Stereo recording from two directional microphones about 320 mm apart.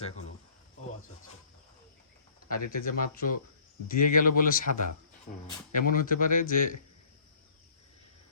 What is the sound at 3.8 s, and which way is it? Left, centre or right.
Speech, left.